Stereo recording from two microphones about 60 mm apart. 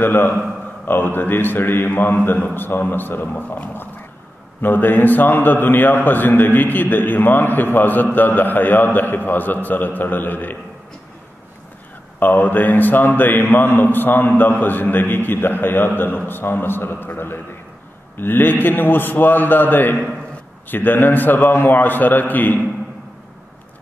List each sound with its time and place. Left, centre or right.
0.0 s a man's voice: left
12.2 s a man's voice: left